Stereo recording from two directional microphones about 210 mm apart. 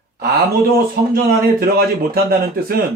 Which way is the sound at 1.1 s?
45° right (ahead or behind).